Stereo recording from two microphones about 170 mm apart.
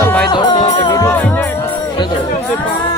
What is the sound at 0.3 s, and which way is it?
Music, 25° left (ahead or behind).